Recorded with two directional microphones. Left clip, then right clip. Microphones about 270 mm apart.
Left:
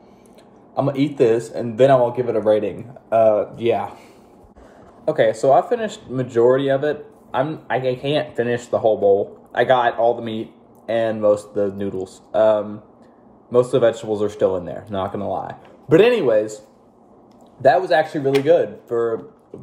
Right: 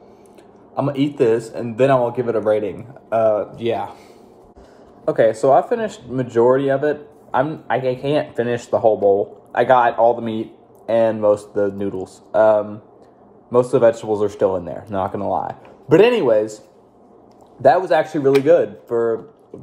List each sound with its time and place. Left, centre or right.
0.7 s speech: centre
5.0 s speech: centre